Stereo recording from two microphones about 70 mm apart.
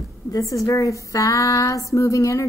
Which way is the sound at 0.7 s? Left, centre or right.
Left.